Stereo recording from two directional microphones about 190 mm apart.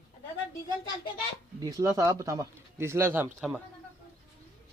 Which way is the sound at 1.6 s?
20° right (ahead or behind).